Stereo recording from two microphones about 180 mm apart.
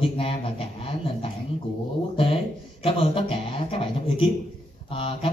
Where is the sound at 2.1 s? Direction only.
30° left (ahead or behind).